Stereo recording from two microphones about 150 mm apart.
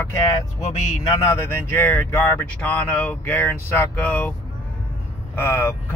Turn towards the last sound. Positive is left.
turn(degrees=15)  # may be behind; listen again after turning